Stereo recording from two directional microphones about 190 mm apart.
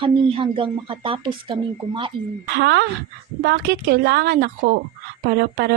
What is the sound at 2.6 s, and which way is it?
Speech, 70° right (ahead or behind).